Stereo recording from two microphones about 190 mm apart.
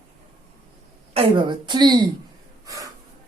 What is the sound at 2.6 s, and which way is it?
Gasp, 20° right (ahead or behind).